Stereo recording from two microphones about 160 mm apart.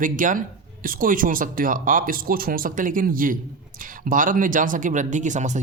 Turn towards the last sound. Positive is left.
turn(degrees=-50)  # may be behind; listen again after turning